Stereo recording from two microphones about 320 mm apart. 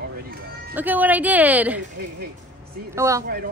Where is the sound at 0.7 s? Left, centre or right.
Centre.